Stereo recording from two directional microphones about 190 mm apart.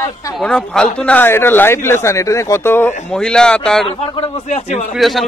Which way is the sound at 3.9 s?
25° left (ahead or behind).